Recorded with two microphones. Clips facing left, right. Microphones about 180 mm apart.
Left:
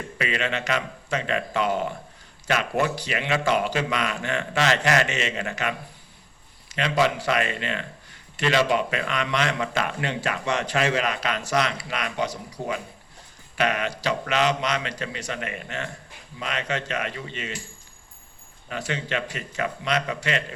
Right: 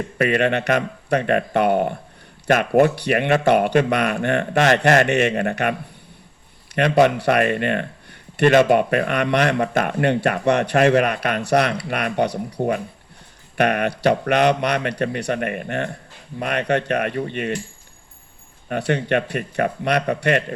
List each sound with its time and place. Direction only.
0.2 s speech: 55° right (ahead or behind)
6.7 s speech: 60° right (ahead or behind)
18.7 s speech: 60° right (ahead or behind)